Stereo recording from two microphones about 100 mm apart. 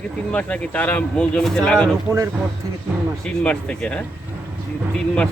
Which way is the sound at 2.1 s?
25° right (ahead or behind).